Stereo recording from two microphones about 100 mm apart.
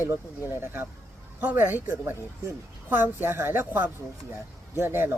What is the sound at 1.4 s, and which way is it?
Speech, 20° right (ahead or behind).